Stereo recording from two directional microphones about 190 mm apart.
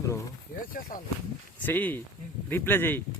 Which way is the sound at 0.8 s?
45° left (ahead or behind).